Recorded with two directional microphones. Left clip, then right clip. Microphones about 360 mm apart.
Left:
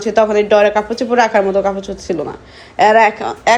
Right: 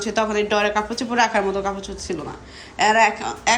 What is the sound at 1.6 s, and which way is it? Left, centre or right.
Speech, centre.